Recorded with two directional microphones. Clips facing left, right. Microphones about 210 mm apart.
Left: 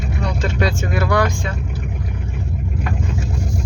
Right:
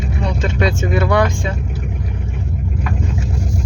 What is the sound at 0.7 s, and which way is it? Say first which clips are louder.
Speech: right 3 dB; 25° right (ahead or behind).